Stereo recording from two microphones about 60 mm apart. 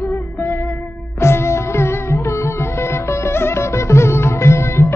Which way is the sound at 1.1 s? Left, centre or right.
Left.